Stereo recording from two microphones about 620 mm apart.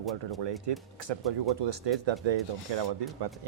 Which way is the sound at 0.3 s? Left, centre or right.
Right.